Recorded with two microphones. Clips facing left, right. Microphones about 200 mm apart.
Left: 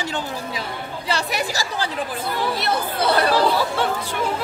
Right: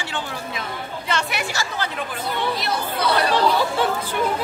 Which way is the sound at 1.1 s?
35° left (ahead or behind).